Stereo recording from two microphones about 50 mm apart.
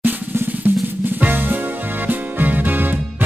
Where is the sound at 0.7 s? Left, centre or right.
Right.